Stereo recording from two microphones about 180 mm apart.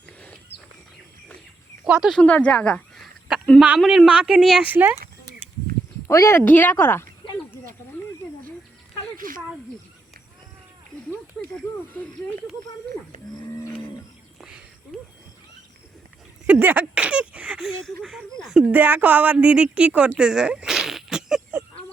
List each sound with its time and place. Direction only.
1.8 s a sound: 5° right (ahead or behind)
3.4 s speech: 5° left (ahead or behind)
6.1 s speech: 15° left (ahead or behind)
9.1 s snake: 50° right (ahead or behind)
13.1 s livestock: 45° right (ahead or behind)
16.5 s speech: 10° right (ahead or behind)
18.7 s a woman's voice: 10° right (ahead or behind)